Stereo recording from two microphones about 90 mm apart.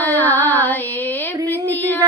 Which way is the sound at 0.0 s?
20° left (ahead or behind).